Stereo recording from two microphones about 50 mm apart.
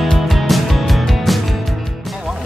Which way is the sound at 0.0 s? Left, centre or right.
Centre.